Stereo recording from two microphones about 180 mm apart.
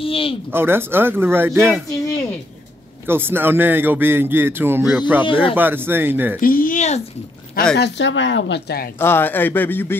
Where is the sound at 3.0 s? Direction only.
10° right (ahead or behind).